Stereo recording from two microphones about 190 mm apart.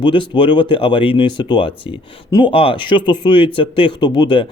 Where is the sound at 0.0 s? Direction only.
25° left (ahead or behind).